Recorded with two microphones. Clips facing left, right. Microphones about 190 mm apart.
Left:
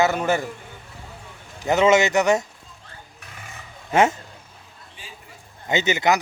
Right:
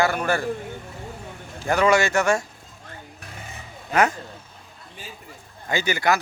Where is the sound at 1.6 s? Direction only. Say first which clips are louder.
Left 2 dB; 20° left (ahead or behind).